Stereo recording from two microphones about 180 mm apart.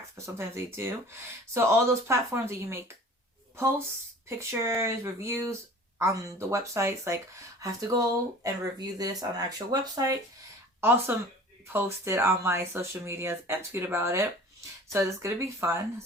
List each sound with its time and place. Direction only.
0.2 s speech: 15° right (ahead or behind)
4.3 s speech: 15° right (ahead or behind)